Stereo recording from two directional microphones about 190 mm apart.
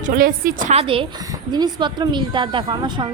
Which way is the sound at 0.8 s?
30° right (ahead or behind).